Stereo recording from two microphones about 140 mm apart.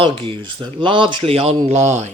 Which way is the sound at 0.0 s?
40° right (ahead or behind).